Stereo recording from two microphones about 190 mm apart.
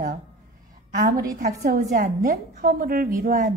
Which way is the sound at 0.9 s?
50° right (ahead or behind).